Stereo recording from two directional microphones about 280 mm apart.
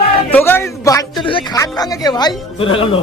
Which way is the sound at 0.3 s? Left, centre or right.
Centre.